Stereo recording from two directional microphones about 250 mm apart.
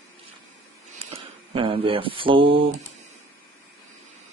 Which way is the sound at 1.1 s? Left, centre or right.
Right.